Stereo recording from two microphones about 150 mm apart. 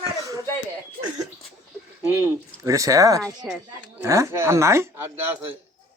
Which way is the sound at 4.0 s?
20° right (ahead or behind).